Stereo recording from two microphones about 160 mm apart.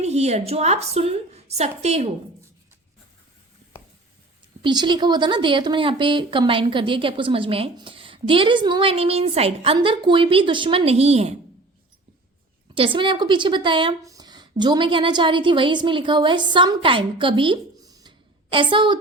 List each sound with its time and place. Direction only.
0.0 s a woman's voice: 40° right (ahead or behind)
4.6 s a woman's voice: 30° right (ahead or behind)
12.7 s a woman's voice: 35° right (ahead or behind)